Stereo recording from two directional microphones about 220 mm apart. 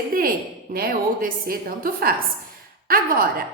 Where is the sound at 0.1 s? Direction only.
40° right (ahead or behind).